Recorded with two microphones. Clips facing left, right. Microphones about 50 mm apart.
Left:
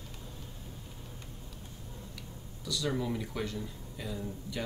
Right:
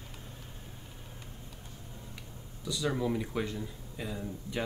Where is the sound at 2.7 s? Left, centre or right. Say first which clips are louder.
Right 2 dB; centre.